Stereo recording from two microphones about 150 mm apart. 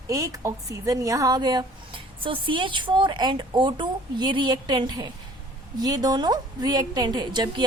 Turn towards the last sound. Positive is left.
turn(degrees=-30)  # may be behind; listen again after turning